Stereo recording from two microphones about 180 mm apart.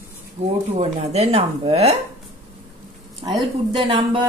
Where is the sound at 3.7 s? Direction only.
30° right (ahead or behind).